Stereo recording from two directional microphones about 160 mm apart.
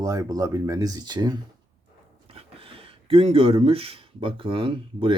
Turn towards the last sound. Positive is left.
turn(degrees=-30)  # may be behind; listen again after turning